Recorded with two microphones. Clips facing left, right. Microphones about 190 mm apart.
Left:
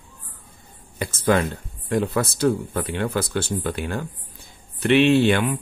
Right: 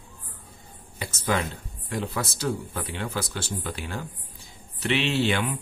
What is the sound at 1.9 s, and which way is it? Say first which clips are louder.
Speech: left 8 dB; 55° left (ahead or behind).